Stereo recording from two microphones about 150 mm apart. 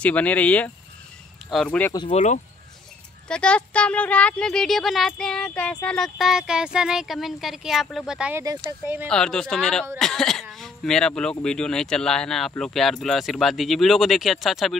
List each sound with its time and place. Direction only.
0.0 s speech: 10° left (ahead or behind)
2.1 s speech: 50° left (ahead or behind)
3.3 s speech: 5° left (ahead or behind); by 9.0 s 15° right (ahead or behind)
9.1 s speech: 5° left (ahead or behind)